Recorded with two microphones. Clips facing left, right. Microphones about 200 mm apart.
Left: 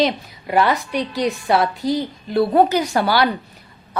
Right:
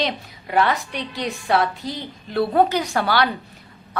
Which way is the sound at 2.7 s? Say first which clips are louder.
Left 3 dB; 5° left (ahead or behind).